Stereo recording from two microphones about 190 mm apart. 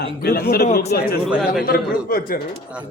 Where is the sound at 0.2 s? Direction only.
55° left (ahead or behind).